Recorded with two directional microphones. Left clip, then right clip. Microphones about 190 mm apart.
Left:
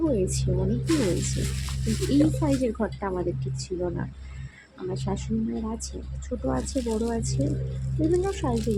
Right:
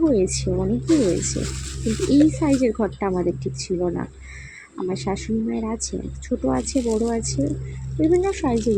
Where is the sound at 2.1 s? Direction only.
20° right (ahead or behind).